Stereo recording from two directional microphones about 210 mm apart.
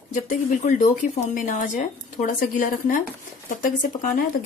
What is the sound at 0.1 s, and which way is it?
A woman's voice, 35° left (ahead or behind).